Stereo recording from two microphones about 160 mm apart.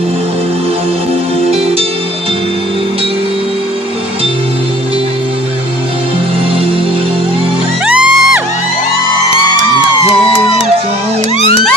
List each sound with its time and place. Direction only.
7.9 s music: 5° right (ahead or behind)